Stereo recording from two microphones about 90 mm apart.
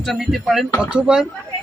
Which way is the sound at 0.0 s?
Centre (ahead or behind).